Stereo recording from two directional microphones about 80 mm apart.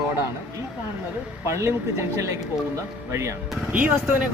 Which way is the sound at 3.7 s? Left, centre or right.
Centre.